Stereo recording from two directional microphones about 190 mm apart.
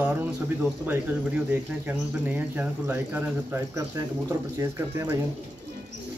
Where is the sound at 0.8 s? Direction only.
10° right (ahead or behind).